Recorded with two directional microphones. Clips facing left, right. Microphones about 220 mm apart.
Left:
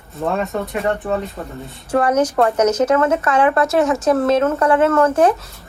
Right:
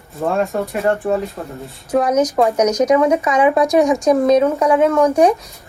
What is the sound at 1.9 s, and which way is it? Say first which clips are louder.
Speech: right 1 dB; 10° right (ahead or behind).